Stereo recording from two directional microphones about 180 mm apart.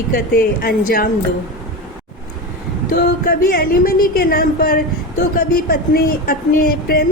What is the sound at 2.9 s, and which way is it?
A woman's voice, 50° left (ahead or behind).